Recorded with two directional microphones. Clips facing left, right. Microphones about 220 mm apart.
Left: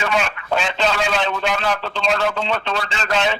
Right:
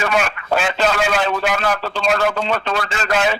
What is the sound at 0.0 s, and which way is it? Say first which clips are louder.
Speech: right 2 dB; 50° right (ahead or behind).